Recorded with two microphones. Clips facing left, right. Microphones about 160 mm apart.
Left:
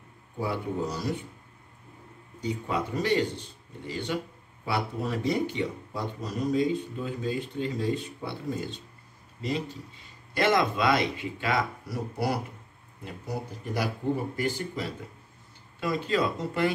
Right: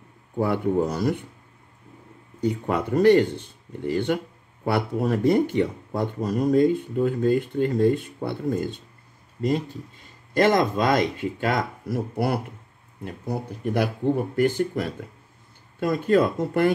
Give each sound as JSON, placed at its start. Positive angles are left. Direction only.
{"t": 0.4, "sound": "speech", "side_deg": -55}
{"t": 2.4, "sound": "speech", "side_deg": -55}
{"t": 10.3, "sound": "speech", "side_deg": -45}